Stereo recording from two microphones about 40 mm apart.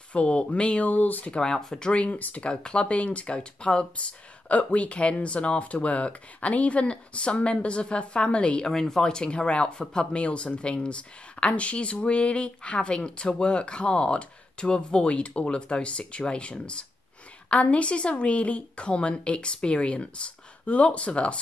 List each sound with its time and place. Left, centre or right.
0.1 s speech: left
1.3 s speech: centre
1.9 s speech: left
2.1 s speech: left
2.4 s speech: left
8.7 s speech: centre; by 21.4 s left